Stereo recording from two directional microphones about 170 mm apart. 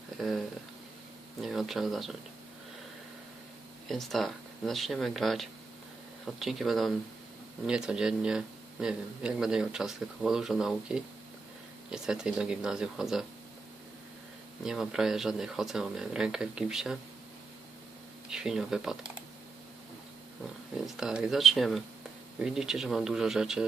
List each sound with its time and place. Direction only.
0.2 s speech: centre (ahead or behind)
3.8 s speech: centre (ahead or behind)
14.6 s speech: 5° right (ahead or behind)
18.3 s speech: 5° right (ahead or behind)
20.8 s speech: 5° right (ahead or behind)